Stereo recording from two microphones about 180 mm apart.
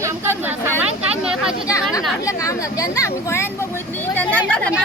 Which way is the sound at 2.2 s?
20° left (ahead or behind).